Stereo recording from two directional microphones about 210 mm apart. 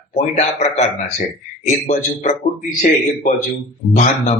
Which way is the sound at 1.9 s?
35° left (ahead or behind).